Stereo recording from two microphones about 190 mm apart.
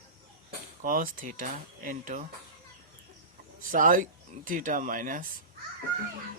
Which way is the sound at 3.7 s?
45° right (ahead or behind).